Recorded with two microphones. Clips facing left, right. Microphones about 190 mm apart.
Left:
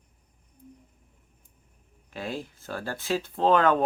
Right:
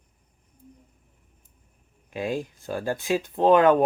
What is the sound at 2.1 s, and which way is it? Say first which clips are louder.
Speech: right 6 dB; 15° right (ahead or behind).